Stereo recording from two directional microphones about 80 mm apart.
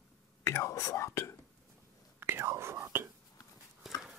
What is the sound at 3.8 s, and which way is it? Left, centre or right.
Horse, centre.